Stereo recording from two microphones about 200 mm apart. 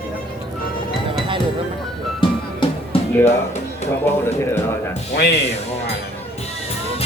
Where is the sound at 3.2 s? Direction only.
35° left (ahead or behind).